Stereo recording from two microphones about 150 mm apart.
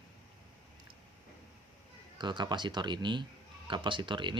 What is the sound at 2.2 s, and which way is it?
Speech, 30° right (ahead or behind).